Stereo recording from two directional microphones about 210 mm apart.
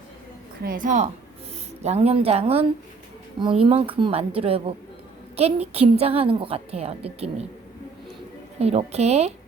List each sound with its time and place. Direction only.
0.6 s a woman's voice: 40° right (ahead or behind)
8.5 s a woman's voice: 30° right (ahead or behind)